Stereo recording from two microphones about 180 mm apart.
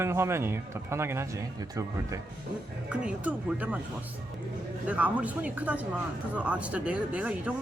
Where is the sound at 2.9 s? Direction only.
5° right (ahead or behind).